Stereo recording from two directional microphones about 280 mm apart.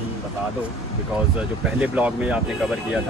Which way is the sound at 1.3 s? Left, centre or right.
Centre.